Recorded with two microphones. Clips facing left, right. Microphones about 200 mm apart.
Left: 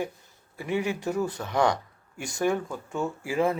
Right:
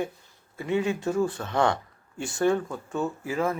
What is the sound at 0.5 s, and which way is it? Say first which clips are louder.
Speech: right 2 dB; 20° right (ahead or behind).